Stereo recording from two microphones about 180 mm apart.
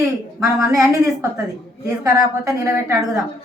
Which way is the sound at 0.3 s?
20° right (ahead or behind).